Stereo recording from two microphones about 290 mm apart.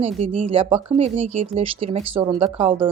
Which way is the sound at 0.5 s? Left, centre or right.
Centre.